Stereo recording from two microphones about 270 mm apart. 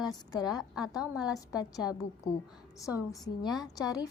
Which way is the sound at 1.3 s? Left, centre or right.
Centre.